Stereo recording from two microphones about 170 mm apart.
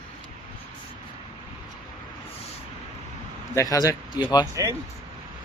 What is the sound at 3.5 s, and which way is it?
Speech, 20° left (ahead or behind).